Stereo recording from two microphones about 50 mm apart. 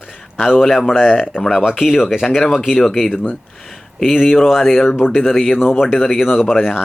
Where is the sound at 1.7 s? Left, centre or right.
Centre.